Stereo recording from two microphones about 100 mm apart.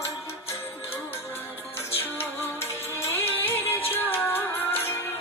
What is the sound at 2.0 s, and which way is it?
Music, 25° left (ahead or behind).